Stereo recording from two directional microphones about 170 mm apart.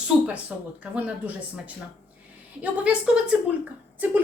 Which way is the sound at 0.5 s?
5° right (ahead or behind).